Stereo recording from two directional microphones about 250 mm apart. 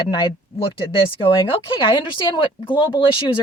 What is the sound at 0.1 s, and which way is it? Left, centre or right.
Speech, centre.